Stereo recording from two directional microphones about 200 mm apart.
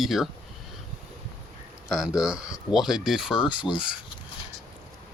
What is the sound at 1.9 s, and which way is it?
Speech, 5° right (ahead or behind).